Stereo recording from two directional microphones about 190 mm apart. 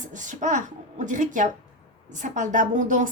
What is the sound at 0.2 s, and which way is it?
A woman's voice, 40° right (ahead or behind).